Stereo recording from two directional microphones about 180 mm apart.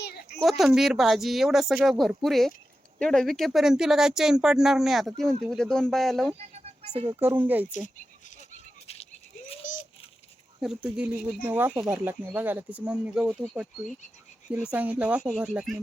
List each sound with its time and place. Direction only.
0.0 s a sound: 60° left (ahead or behind)
0.4 s speech: centre (ahead or behind)
6.4 s a sound: 35° right (ahead or behind)
7.1 s speech: 10° right (ahead or behind)
9.6 s rattle: 45° left (ahead or behind)
10.6 s speech: 5° right (ahead or behind)